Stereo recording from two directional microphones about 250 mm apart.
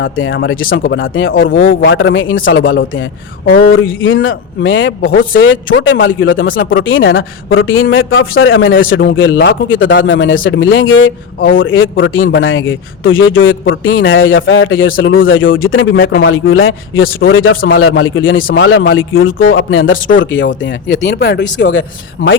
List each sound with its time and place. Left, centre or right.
0.0 s a man's voice: left
1.3 s speech: left
1.9 s a man's voice: left